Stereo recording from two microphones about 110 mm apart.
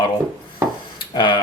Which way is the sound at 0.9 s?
45° left (ahead or behind).